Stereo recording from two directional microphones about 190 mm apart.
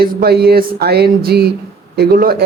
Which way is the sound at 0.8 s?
55° right (ahead or behind).